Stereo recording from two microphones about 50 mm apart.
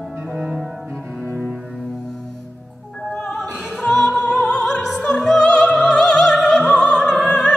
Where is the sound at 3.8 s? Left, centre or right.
Centre.